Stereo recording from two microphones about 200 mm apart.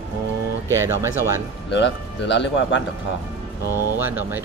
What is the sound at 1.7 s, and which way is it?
Speech, 65° left (ahead or behind).